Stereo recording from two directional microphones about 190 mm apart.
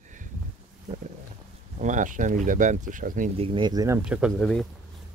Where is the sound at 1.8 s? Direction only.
40° right (ahead or behind).